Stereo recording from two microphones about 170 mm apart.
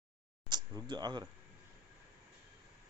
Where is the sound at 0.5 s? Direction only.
25° right (ahead or behind).